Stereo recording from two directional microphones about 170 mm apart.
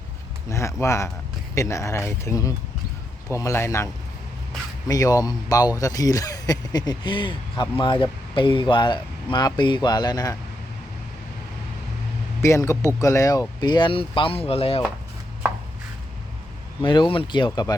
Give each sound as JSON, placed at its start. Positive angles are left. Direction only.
{"t": 0.5, "sound": "speech", "side_deg": 15}
{"t": 4.9, "sound": "speech", "side_deg": 20}
{"t": 12.4, "sound": "speech", "side_deg": 15}
{"t": 16.8, "sound": "speech", "side_deg": 30}